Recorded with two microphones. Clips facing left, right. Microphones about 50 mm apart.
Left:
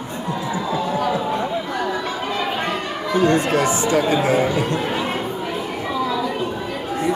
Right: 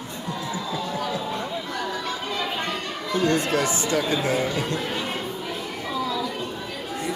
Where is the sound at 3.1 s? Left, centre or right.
Left.